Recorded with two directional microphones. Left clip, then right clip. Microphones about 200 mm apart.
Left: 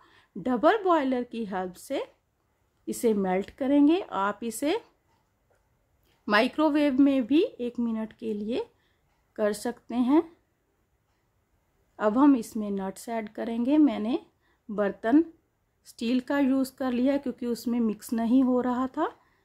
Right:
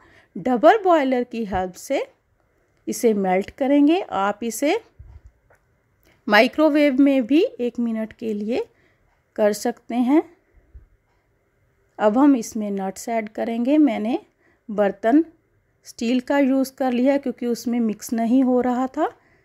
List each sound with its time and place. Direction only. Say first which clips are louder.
0.0 s speech: right 7 dB; 20° right (ahead or behind)
6.2 s speech: right 8 dB; 25° right (ahead or behind)
12.0 s speech: right 5 dB; 20° right (ahead or behind)